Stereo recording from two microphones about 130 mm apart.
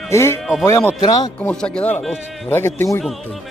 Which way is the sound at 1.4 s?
5° left (ahead or behind).